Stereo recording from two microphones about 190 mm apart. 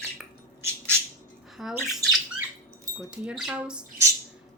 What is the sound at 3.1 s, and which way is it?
Speech, 5° right (ahead or behind).